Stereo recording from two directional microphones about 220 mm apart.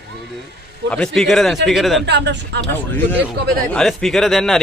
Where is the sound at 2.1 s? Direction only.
50° right (ahead or behind).